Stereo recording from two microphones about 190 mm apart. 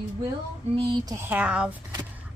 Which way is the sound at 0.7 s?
25° right (ahead or behind).